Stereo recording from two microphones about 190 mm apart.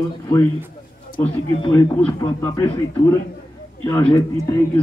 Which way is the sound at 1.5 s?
25° left (ahead or behind).